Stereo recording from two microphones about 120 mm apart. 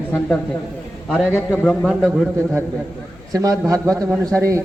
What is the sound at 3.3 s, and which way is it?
A man's voice, 30° right (ahead or behind).